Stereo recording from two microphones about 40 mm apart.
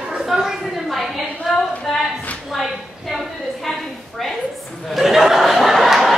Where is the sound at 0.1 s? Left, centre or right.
Centre.